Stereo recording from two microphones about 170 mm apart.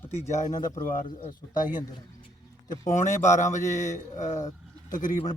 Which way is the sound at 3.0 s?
45° left (ahead or behind).